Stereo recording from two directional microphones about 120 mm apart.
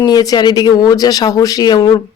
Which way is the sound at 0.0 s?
35° left (ahead or behind).